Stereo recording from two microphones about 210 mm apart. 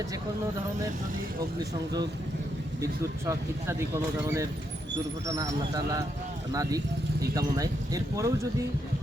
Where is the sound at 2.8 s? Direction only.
15° right (ahead or behind).